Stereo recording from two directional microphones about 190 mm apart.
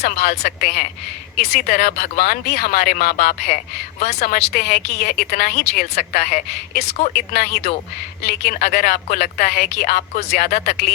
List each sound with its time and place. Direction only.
0.0 s a woman's voice: 55° left (ahead or behind)
6.8 s a woman's voice: 35° left (ahead or behind)
7.1 s a woman's voice: 50° left (ahead or behind)